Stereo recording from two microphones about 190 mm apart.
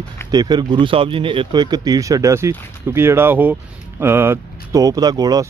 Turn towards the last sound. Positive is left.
turn(degrees=-20)  # may be behind; listen again after turning